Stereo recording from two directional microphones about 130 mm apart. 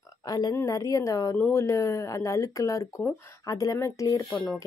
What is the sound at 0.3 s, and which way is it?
Speech, 30° left (ahead or behind).